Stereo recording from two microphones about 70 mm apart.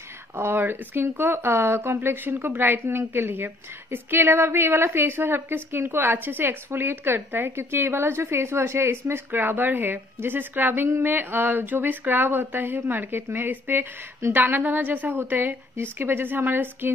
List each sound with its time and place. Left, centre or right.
0.4 s speech: right